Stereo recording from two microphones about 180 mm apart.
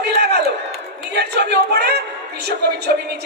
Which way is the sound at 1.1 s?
65° right (ahead or behind).